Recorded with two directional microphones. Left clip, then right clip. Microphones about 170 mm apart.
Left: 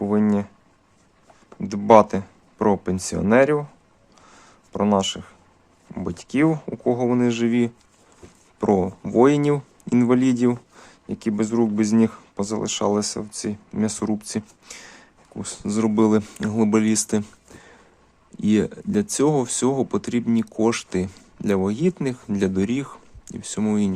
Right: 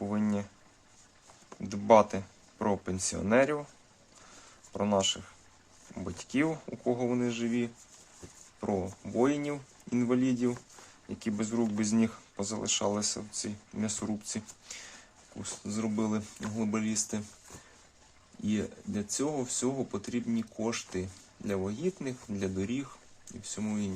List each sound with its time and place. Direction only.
0.0 s a sound: 35° left (ahead or behind)
1.6 s speech: 35° left (ahead or behind)
4.7 s speech: 35° left (ahead or behind); by 10.5 s 50° left (ahead or behind)
11.1 s speech: 35° left (ahead or behind)
15.6 s speech: 55° left (ahead or behind)
18.4 s speech: 55° left (ahead or behind)